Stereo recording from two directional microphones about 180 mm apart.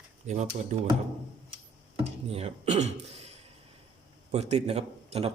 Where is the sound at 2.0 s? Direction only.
35° right (ahead or behind).